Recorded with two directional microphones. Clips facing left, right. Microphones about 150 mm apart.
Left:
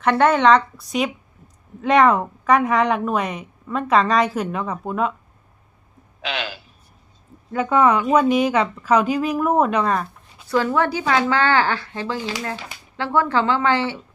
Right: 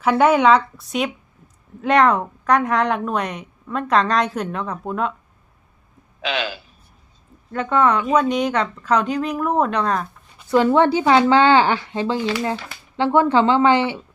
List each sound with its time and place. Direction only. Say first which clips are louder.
0.0 s a woman's voice: right 1 dB; 5° right (ahead or behind)
7.5 s a woman's voice: left 1 dB; 5° left (ahead or behind)
10.5 s speech: right 5 dB; 20° right (ahead or behind)